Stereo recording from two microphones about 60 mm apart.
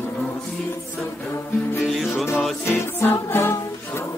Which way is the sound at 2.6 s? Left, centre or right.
Left.